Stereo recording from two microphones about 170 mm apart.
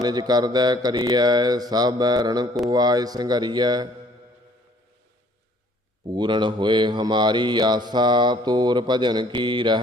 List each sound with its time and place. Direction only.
0.0 s speech: 25° right (ahead or behind)
6.1 s speech: 25° right (ahead or behind)